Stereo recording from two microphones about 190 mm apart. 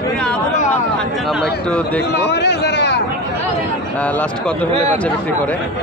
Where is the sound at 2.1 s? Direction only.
65° left (ahead or behind).